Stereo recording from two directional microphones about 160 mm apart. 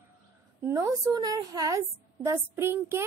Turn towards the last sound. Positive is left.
turn(degrees=-15)  # may be behind; listen again after turning